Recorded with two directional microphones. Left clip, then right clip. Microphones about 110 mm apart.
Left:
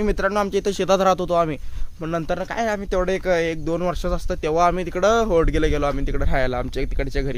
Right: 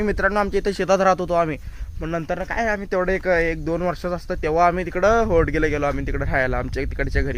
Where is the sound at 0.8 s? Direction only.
30° left (ahead or behind).